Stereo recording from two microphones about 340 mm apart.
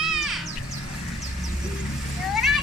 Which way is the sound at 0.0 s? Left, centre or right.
Centre.